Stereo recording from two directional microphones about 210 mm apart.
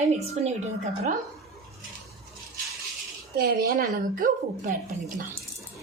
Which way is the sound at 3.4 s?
45° right (ahead or behind).